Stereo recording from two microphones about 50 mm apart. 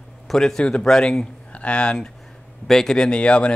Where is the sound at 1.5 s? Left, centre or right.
Left.